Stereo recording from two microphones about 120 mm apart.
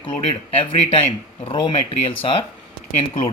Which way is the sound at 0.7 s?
50° left (ahead or behind).